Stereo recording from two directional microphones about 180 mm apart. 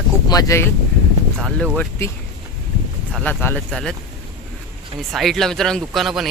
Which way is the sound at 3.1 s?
5° left (ahead or behind).